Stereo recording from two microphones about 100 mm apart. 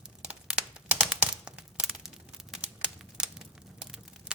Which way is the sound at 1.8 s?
5° right (ahead or behind).